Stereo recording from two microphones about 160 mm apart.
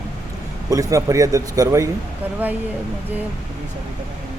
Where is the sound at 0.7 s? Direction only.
20° right (ahead or behind).